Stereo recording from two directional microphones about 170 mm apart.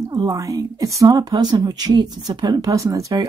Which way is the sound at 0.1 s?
20° right (ahead or behind).